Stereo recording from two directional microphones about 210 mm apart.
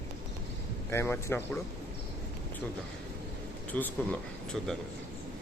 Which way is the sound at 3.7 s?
5° left (ahead or behind).